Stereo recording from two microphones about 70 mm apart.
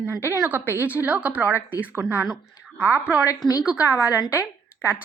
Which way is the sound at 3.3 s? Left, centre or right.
Left.